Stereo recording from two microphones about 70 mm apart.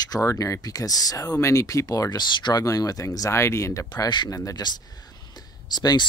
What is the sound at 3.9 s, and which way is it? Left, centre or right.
Speech, left.